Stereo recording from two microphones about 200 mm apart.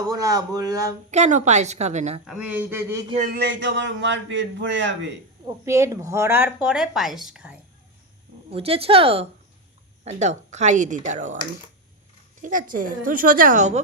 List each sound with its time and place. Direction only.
0.0 s a woman's voice: 20° right (ahead or behind)
1.1 s speech: 35° right (ahead or behind)
2.2 s a woman's voice: 5° right (ahead or behind)
3.3 s a man's voice: 60° right (ahead or behind)
5.6 s a woman's voice: 15° right (ahead or behind)
8.4 s speech: 30° right (ahead or behind)
12.4 s a woman's voice: 40° right (ahead or behind)